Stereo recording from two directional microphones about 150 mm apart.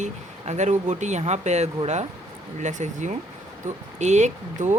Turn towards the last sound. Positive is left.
turn(degrees=-55)  # may be behind; listen again after turning